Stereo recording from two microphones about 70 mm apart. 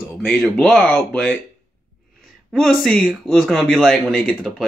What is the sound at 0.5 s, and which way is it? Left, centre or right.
Speech, centre.